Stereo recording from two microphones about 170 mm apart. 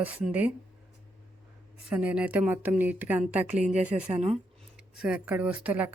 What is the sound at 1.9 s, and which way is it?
A woman's voice, 5° right (ahead or behind).